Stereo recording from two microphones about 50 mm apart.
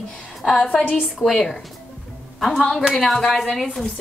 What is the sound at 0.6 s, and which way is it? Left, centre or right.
Speech, left.